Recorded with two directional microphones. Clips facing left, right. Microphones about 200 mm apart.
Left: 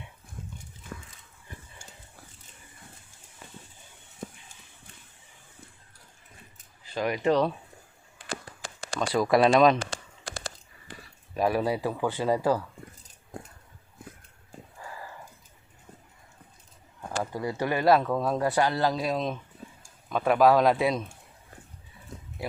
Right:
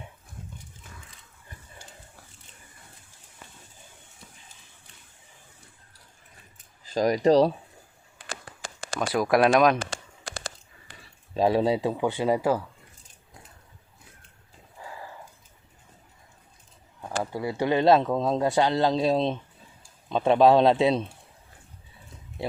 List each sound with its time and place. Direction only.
6.9 s speech: 40° right (ahead or behind)
9.0 s speech: centre (ahead or behind)
11.3 s speech: 25° right (ahead or behind)
17.0 s speech: 5° right (ahead or behind); by 21.0 s 25° right (ahead or behind)